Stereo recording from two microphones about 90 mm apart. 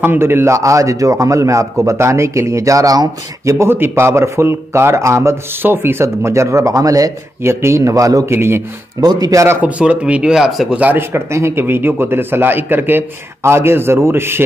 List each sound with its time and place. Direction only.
0.0 s a man's voice: 25° right (ahead or behind)
9.0 s speech: 45° right (ahead or behind)
9.6 s speech: 15° right (ahead or behind)
10.8 s a man's voice: 25° right (ahead or behind)